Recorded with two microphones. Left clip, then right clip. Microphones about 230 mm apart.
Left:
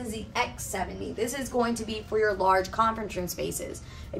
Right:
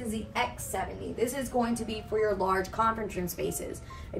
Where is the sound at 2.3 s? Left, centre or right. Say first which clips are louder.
Left 5 dB; centre.